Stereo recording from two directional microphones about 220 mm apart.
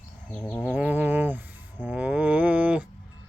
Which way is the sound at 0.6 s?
5° right (ahead or behind).